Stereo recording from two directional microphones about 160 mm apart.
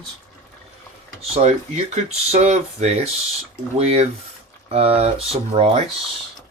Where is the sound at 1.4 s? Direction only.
45° right (ahead or behind).